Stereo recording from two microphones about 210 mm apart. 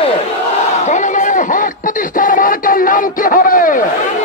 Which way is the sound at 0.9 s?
35° left (ahead or behind).